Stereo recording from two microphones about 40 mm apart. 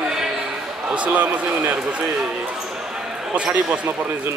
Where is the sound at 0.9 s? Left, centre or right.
Right.